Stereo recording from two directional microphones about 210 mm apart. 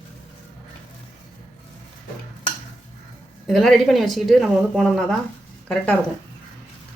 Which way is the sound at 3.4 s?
Centre (ahead or behind).